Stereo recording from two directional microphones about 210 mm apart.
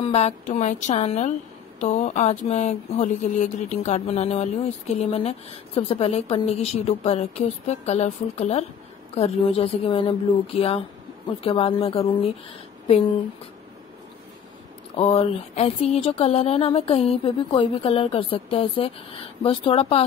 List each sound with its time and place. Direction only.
0.0 s speech: 30° left (ahead or behind)
15.0 s speech: 30° left (ahead or behind)